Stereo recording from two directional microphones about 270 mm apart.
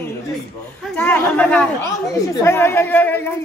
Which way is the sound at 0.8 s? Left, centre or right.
Centre.